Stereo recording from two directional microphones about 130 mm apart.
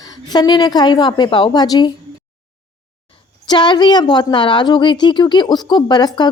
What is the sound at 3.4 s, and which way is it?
A woman's voice, 35° left (ahead or behind).